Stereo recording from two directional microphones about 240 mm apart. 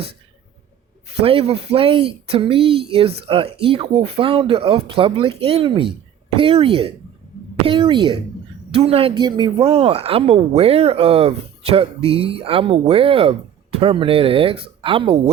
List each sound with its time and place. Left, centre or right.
1.2 s speech: right